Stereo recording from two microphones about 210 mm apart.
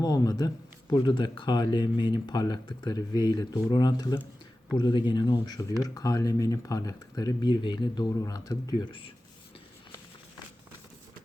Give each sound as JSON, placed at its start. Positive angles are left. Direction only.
{"t": 0.0, "sound": "speech", "side_deg": 20}